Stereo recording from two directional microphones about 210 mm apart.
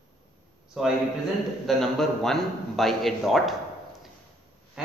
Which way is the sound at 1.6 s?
Centre (ahead or behind).